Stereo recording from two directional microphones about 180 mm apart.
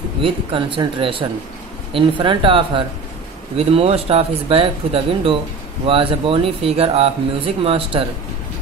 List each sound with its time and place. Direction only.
0.2 s speech: 30° right (ahead or behind)